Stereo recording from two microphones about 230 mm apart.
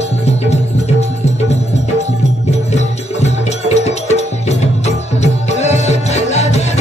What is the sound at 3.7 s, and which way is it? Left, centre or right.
Music, left.